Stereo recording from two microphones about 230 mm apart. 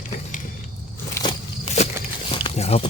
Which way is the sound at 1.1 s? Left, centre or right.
Centre.